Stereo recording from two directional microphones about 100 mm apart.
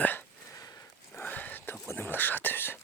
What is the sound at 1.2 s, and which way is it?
Whispering, 15° left (ahead or behind).